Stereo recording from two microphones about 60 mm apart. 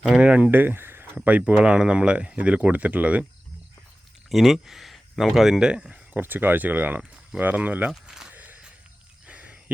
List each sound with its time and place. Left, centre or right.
0.0 s speech: centre
0.5 s speech: right
1.2 s speech: right
4.3 s speech: centre
6.1 s speech: right
7.9 s speech: centre
8.3 s a sound: right